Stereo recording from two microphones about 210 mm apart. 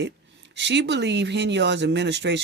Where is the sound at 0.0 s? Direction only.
55° right (ahead or behind).